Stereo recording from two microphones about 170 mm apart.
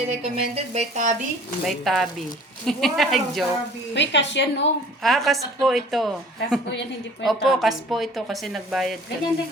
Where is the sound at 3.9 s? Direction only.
90° left.